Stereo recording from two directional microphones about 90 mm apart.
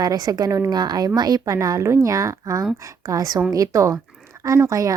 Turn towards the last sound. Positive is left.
turn(degrees=-35)  # may be behind; listen again after turning